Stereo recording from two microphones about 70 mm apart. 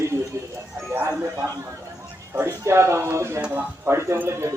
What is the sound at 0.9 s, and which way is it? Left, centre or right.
A man's voice, right.